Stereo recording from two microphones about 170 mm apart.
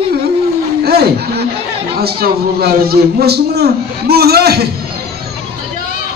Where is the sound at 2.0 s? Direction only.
65° right (ahead or behind).